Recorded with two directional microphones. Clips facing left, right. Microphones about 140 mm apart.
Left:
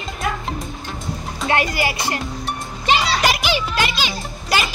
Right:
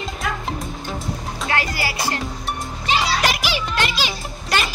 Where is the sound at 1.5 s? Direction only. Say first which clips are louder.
Left 4 dB; 20° left (ahead or behind).